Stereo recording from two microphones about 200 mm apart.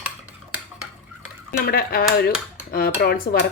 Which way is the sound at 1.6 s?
50° left (ahead or behind).